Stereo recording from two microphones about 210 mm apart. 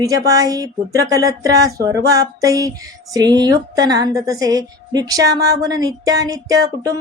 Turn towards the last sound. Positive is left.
turn(degrees=-15)  # may be behind; listen again after turning